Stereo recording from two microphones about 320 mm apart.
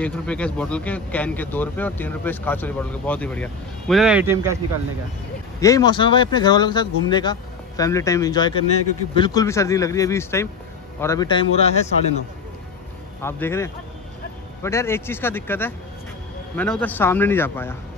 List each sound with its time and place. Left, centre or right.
0.0 s speech: centre
5.6 s speech: centre
13.2 s speech: centre